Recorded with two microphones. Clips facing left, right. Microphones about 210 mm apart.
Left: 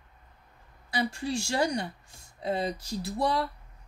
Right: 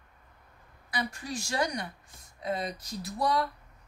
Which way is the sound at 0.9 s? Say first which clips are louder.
Left 5 dB; 30° left (ahead or behind).